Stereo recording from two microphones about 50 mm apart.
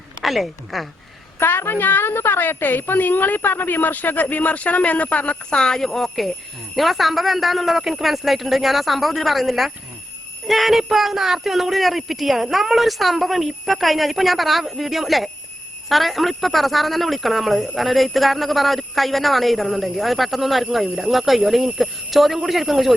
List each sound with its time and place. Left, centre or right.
0.2 s speech: centre
1.4 s a woman's voice: left; by 23.0 s centre